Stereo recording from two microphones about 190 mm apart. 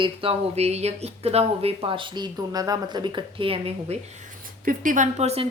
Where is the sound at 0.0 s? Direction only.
30° right (ahead or behind).